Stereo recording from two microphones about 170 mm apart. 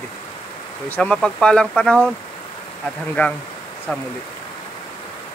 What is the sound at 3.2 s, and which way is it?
Speech, 10° left (ahead or behind).